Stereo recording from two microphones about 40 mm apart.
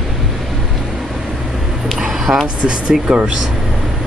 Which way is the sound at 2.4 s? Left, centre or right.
Right.